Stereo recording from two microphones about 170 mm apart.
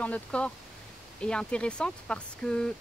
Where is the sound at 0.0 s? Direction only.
5° left (ahead or behind).